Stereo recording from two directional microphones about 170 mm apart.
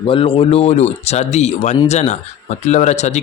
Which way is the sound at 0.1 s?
30° left (ahead or behind).